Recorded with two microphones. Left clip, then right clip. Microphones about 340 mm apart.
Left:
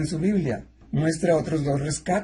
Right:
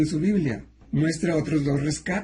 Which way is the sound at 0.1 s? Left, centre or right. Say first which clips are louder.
Even; centre.